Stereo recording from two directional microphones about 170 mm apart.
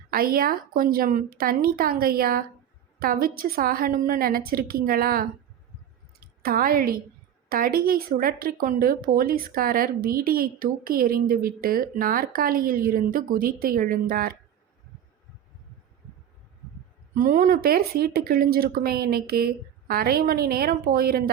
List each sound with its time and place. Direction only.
0.1 s a woman's voice: 60° right (ahead or behind)
17.2 s speech: 50° right (ahead or behind)